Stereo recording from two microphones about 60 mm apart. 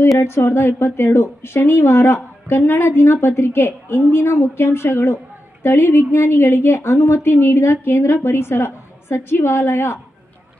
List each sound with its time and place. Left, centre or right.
0.2 s a woman's voice: left